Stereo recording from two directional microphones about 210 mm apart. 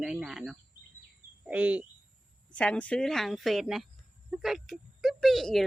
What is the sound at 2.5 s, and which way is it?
Speech, 5° left (ahead or behind).